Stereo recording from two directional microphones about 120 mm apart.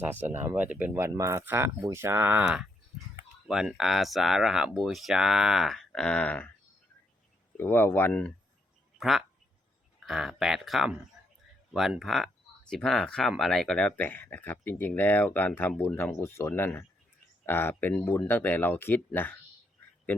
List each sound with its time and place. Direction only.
0.0 s speech: 15° right (ahead or behind)
3.4 s speech: 5° right (ahead or behind); by 6.5 s 10° left (ahead or behind)
7.5 s speech: 20° left (ahead or behind)
9.0 s speech: centre (ahead or behind); by 19.3 s 15° left (ahead or behind)